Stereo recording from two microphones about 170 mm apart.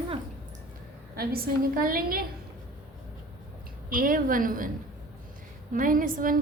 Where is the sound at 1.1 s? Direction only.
60° right (ahead or behind).